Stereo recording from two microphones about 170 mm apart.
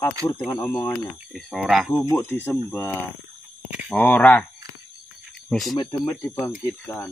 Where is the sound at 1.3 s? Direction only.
Centre (ahead or behind).